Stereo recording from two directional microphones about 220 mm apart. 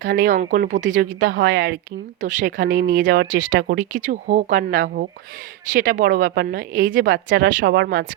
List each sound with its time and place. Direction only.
0.0 s speech: 40° right (ahead or behind)